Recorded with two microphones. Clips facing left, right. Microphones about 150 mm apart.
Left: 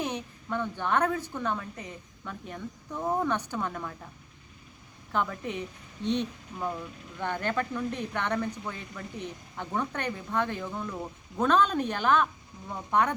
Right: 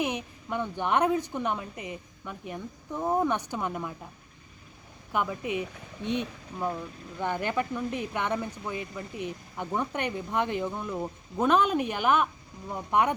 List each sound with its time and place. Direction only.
0.0 s speech: 10° right (ahead or behind)
5.1 s speech: 10° right (ahead or behind)